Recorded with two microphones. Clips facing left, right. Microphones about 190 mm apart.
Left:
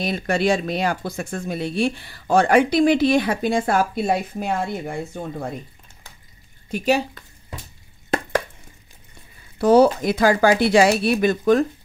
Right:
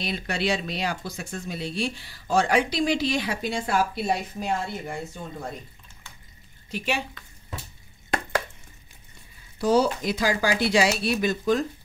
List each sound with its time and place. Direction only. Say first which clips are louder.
0.0 s speech: left 7 dB; 45° left (ahead or behind)
6.7 s speech: left 9 dB; 40° left (ahead or behind)
9.6 s speech: left 7 dB; 60° left (ahead or behind)